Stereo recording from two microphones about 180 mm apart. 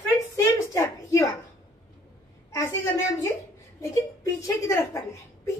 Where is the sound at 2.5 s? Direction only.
15° left (ahead or behind).